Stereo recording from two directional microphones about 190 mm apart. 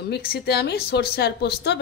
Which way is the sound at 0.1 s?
55° left (ahead or behind).